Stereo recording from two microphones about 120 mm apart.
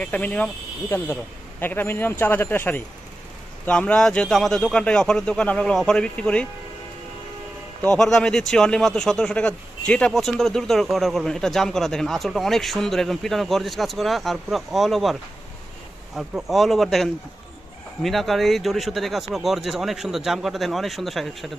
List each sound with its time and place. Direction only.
0.0 s speech: 10° left (ahead or behind)
7.8 s speech: 5° left (ahead or behind)
16.2 s speech: 5° right (ahead or behind)